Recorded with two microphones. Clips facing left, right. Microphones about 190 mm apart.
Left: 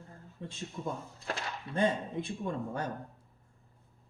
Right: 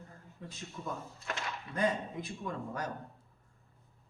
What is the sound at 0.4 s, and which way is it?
Speech, 30° left (ahead or behind).